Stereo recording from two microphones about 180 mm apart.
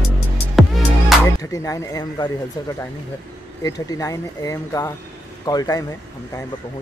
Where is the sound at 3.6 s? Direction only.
20° left (ahead or behind).